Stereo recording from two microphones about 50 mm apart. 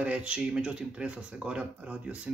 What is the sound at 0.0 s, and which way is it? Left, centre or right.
Speech, right.